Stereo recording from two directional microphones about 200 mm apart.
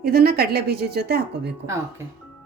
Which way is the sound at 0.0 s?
50° right (ahead or behind).